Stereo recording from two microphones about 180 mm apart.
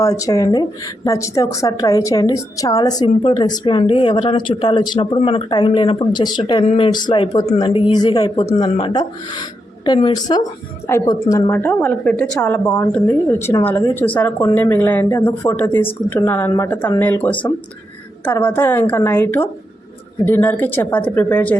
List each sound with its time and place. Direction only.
0.0 s speech: 20° left (ahead or behind)
8.4 s speech: 35° left (ahead or behind); by 12.6 s 5° left (ahead or behind)
12.6 s speech: 20° left (ahead or behind)